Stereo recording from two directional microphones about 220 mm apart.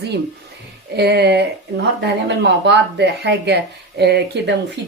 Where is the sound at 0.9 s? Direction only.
50° right (ahead or behind).